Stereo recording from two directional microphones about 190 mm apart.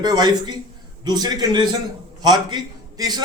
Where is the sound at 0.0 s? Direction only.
20° right (ahead or behind).